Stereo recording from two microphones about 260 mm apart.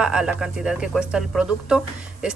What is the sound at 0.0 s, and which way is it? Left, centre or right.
Speech, centre.